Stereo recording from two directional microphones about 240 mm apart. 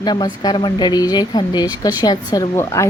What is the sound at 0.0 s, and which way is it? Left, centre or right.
Speech, centre.